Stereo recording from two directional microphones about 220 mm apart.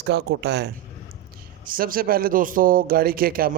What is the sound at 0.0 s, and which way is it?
Speech, 50° right (ahead or behind).